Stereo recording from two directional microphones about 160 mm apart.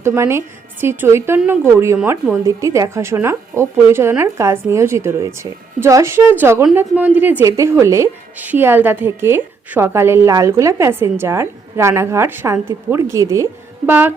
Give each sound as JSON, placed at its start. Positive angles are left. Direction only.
{"t": 0.0, "sound": "a woman's voice", "side_deg": -15}